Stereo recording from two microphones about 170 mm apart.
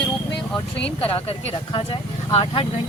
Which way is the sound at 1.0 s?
35° left (ahead or behind).